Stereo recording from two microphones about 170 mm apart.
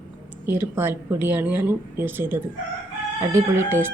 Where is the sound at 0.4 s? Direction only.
10° right (ahead or behind).